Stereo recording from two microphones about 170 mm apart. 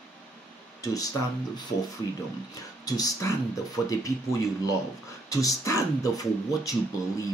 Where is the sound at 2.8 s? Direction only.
20° left (ahead or behind).